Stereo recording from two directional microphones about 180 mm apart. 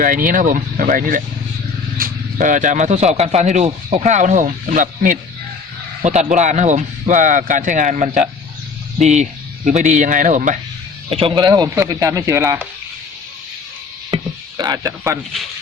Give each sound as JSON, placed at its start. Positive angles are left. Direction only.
{"t": 0.0, "sound": "speech", "side_deg": -50}
{"t": 11.1, "sound": "speech", "side_deg": -30}
{"t": 14.1, "sound": "a sound", "side_deg": -30}
{"t": 14.6, "sound": "speech", "side_deg": -20}